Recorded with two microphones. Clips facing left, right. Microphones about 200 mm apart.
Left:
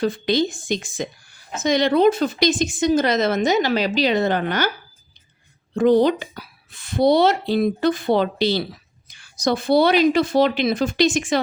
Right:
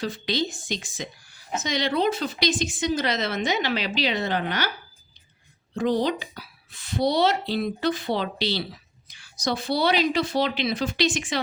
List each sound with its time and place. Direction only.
0.0 s a woman's voice: 50° left (ahead or behind)
5.7 s a woman's voice: 55° left (ahead or behind)